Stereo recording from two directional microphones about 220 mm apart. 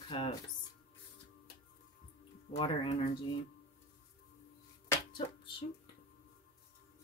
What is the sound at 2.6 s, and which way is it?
Speech, 25° left (ahead or behind).